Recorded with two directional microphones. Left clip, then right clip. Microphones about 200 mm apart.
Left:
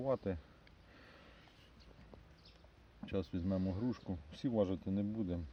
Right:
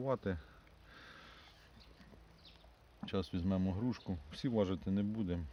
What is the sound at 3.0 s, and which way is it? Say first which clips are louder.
Speech: right 1 dB; 35° right (ahead or behind).